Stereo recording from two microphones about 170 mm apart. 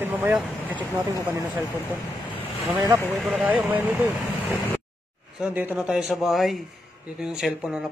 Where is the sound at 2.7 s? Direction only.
15° right (ahead or behind).